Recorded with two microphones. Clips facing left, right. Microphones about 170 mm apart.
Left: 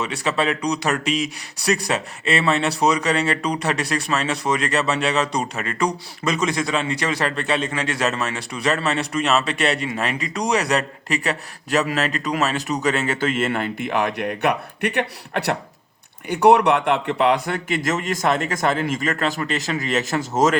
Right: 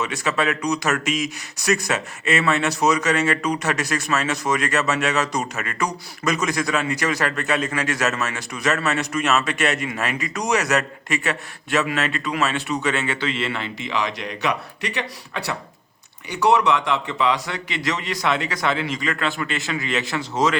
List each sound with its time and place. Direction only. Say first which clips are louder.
0.0 s a man's voice: left 1 dB; 30° left (ahead or behind)